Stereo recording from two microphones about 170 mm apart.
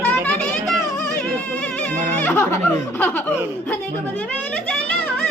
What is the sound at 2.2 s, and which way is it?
Speech, 15° left (ahead or behind).